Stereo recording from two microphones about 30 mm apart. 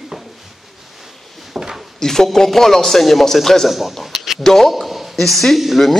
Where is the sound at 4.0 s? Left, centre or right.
Centre.